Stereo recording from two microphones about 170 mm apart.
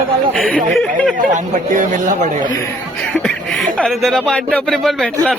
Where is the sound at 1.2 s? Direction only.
50° right (ahead or behind).